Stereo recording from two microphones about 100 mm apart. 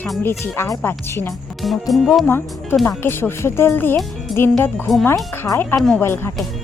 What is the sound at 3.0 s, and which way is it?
Speech, 25° left (ahead or behind).